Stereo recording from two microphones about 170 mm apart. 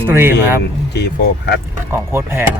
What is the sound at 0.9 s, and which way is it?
Mantra, 75° left (ahead or behind).